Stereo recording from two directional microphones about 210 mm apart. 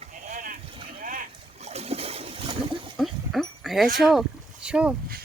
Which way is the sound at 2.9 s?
Centre (ahead or behind).